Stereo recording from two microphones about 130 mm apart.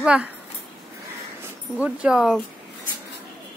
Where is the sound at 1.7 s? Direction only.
10° right (ahead or behind).